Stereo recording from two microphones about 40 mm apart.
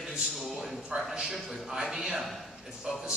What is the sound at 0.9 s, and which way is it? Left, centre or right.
Speech, right.